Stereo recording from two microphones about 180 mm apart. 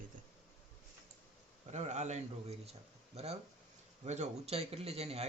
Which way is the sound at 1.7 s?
40° right (ahead or behind).